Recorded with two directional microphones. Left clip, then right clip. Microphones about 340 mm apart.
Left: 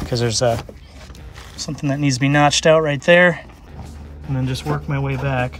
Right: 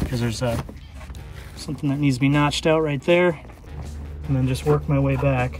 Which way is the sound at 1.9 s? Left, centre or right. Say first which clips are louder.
Left 3 dB; left.